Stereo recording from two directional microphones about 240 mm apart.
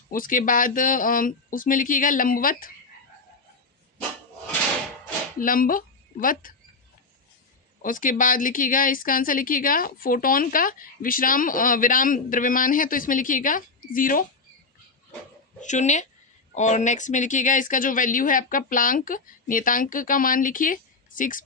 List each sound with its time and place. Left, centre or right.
0.1 s a woman's voice: left
5.4 s speech: left
7.8 s a woman's voice: left
15.6 s a woman's voice: left